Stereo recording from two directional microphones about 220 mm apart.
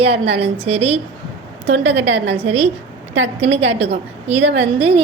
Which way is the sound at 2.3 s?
25° right (ahead or behind).